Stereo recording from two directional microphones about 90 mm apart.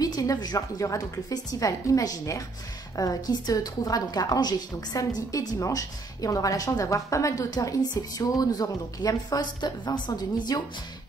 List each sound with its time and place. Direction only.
0.0 s a woman's voice: 45° left (ahead or behind)